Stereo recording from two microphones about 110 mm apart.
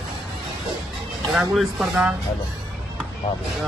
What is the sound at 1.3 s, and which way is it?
Speech, centre (ahead or behind).